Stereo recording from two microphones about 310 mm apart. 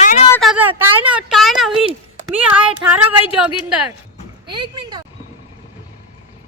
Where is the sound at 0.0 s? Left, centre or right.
Left.